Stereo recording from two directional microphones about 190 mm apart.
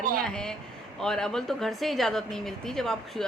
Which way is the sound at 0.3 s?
5° left (ahead or behind).